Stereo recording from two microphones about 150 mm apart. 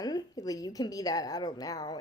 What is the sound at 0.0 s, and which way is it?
Speech, 25° left (ahead or behind).